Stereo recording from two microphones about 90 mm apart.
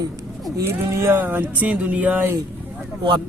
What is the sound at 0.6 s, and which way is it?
Speech, 30° right (ahead or behind).